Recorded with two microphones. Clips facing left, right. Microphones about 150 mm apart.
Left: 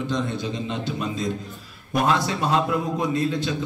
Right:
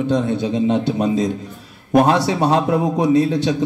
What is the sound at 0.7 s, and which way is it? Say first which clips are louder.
A man's voice: right 10 dB; 70° right (ahead or behind).